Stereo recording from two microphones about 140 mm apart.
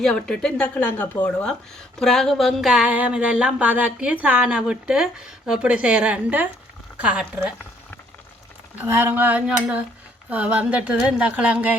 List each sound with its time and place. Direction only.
0.0 s speech: 5° left (ahead or behind)
8.8 s speech: 15° right (ahead or behind)